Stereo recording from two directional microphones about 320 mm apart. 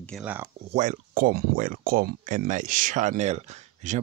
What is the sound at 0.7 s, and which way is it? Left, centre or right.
Speech, right.